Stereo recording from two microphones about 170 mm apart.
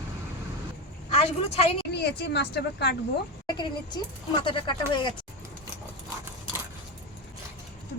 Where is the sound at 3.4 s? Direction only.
25° left (ahead or behind).